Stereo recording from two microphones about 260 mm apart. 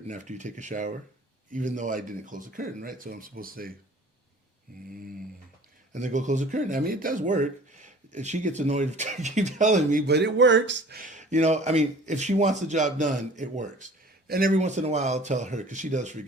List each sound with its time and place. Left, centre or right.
0.1 s speech: right
4.7 s speech: right
5.9 s speech: right
10.1 s speech: right